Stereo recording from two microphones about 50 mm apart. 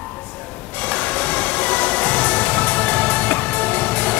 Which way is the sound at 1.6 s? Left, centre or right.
Left.